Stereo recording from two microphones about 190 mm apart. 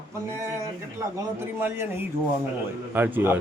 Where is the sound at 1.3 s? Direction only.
10° right (ahead or behind).